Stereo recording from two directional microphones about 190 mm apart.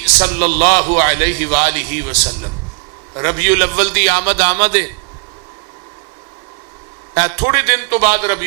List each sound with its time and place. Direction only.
0.0 s a man's voice: 15° right (ahead or behind)
7.1 s a man's voice: 25° right (ahead or behind)